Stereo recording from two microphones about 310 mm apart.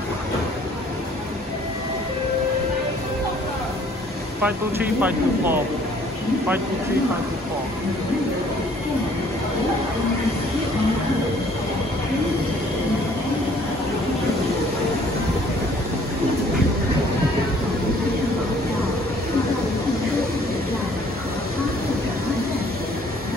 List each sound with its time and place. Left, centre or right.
5.0 s speech: centre